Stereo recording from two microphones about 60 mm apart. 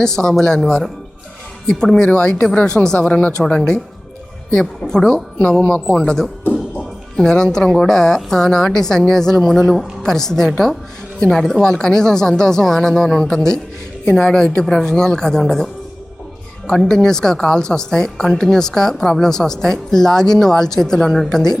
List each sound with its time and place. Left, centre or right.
0.0 s a woman's voice: centre
4.5 s a woman's voice: centre
6.5 s music: left
7.2 s a woman's voice: centre